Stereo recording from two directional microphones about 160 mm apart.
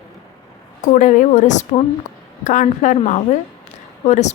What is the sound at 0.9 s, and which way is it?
Speech, 55° left (ahead or behind).